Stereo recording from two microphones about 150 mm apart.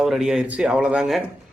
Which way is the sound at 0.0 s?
Centre (ahead or behind).